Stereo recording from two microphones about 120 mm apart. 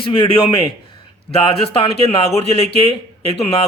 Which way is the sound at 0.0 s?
50° left (ahead or behind).